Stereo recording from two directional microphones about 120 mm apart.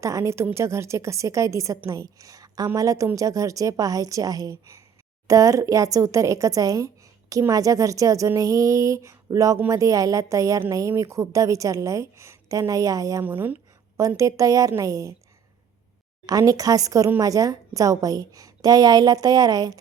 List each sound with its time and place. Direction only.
0.0 s a woman's voice: 25° right (ahead or behind)
13.2 s a woman's voice: 15° right (ahead or behind)
16.2 s a woman's voice: 30° right (ahead or behind)